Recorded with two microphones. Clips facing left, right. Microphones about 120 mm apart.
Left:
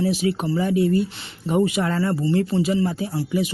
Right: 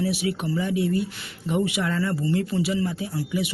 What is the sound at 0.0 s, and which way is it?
Speech, 35° left (ahead or behind).